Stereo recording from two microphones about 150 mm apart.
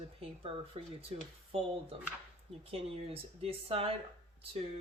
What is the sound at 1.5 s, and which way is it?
Speech, 45° right (ahead or behind).